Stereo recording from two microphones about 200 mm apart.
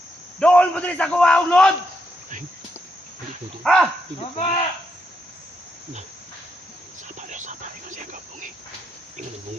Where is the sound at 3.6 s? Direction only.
5° left (ahead or behind).